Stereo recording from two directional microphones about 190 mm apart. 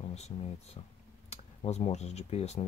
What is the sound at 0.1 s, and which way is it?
Speech, 35° left (ahead or behind).